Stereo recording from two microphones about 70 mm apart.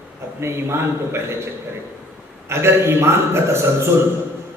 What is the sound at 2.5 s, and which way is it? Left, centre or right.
A man's voice, right.